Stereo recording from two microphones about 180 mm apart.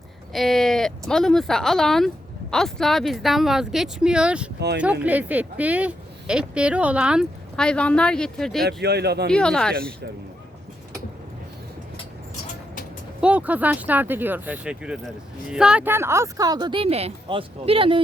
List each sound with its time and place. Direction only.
0.3 s speech: centre (ahead or behind)
8.6 s speech: 65° right (ahead or behind)
9.3 s speech: 5° left (ahead or behind)
13.2 s speech: 10° right (ahead or behind); by 18.0 s 30° right (ahead or behind)